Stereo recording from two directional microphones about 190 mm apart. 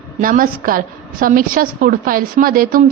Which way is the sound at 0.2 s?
45° right (ahead or behind).